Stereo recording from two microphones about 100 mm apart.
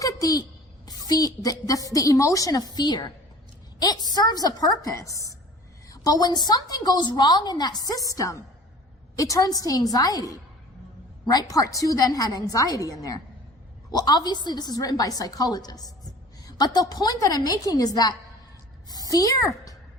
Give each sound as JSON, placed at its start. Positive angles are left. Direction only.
{"t": 0.0, "sound": "a sound", "side_deg": 35}
{"t": 0.9, "sound": "a woman's voice", "side_deg": 40}
{"t": 4.1, "sound": "a woman's voice", "side_deg": 40}